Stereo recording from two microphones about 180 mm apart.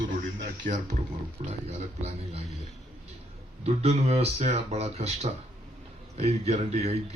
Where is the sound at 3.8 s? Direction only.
35° right (ahead or behind).